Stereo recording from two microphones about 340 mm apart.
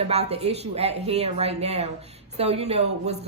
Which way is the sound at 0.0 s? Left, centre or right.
Centre.